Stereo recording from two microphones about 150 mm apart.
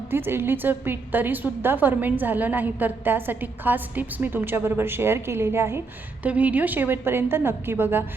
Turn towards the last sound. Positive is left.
turn(degrees=-15)  # may be behind; listen again after turning